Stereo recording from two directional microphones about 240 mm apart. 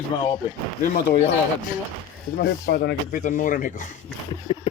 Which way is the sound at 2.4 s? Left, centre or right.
Left.